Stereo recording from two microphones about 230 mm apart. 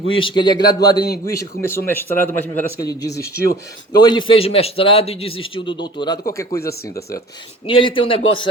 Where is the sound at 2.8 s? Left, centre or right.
Centre.